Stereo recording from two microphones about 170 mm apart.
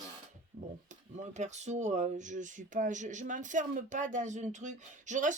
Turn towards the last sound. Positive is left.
turn(degrees=-45)  # may be behind; listen again after turning